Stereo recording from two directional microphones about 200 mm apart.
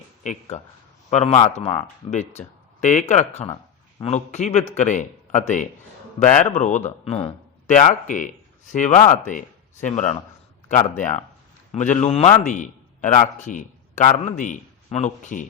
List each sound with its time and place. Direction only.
0.5 s speech: 35° left (ahead or behind)
3.5 s a sound: 20° left (ahead or behind)
4.1 s a man's voice: 35° left (ahead or behind)